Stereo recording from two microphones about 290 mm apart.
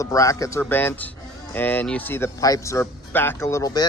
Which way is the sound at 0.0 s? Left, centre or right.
Centre.